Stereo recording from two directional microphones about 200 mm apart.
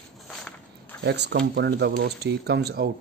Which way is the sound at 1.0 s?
55° right (ahead or behind).